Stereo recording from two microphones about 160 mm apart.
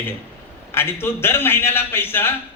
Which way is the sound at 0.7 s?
15° left (ahead or behind).